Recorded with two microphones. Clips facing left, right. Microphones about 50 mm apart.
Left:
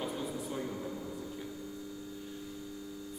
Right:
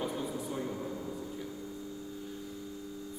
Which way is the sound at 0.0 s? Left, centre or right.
Centre.